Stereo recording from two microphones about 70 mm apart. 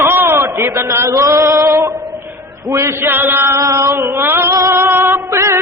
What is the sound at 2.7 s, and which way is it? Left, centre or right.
Mantra, right.